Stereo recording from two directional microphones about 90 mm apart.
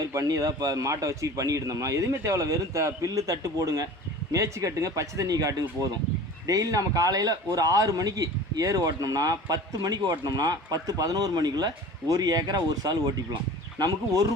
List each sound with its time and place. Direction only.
0.0 s a man's voice: 40° right (ahead or behind)